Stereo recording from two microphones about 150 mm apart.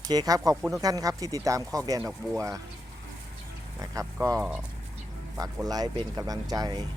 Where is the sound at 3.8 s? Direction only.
25° right (ahead or behind).